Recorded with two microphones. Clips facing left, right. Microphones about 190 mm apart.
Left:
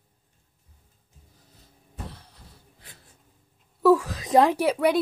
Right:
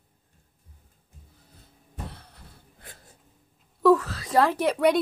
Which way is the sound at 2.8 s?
50° right (ahead or behind).